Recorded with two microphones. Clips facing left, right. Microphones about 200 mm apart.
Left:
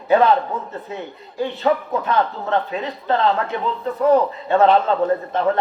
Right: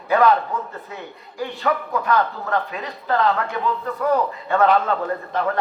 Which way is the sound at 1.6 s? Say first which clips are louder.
Left 2 dB; 25° left (ahead or behind).